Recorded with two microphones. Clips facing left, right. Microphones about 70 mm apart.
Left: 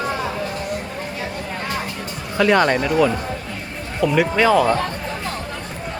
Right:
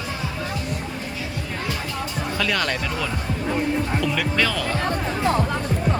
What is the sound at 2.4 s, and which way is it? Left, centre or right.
Speech, left.